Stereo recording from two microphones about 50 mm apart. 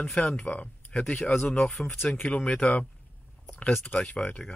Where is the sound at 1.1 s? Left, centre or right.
Centre.